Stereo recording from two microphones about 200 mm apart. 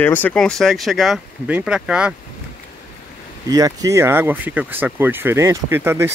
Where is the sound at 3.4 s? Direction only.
15° right (ahead or behind).